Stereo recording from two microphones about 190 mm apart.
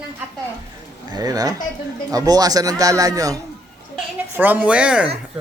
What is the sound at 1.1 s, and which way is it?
Speech, 20° right (ahead or behind).